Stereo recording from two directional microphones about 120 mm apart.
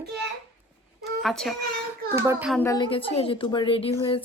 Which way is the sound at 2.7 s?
45° left (ahead or behind).